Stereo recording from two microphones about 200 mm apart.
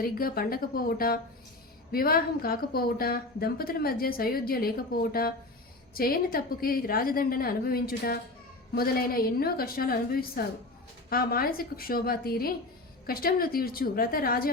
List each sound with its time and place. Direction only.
0.0 s a woman's voice: 50° left (ahead or behind)